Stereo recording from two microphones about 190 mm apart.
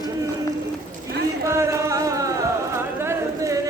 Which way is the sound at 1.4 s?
15° right (ahead or behind).